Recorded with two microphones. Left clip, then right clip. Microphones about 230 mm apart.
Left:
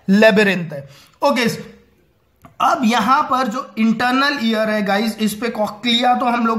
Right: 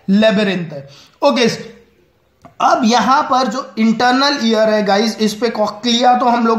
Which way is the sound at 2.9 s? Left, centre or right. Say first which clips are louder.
Right 3 dB; left.